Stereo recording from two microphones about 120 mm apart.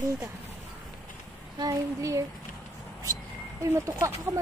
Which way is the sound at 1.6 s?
30° right (ahead or behind).